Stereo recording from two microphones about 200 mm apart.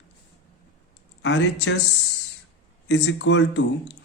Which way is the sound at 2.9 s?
65° left (ahead or behind).